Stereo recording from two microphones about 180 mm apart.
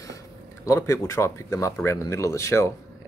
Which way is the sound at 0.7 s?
15° left (ahead or behind).